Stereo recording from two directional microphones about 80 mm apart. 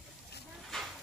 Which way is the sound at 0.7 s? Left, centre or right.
Centre.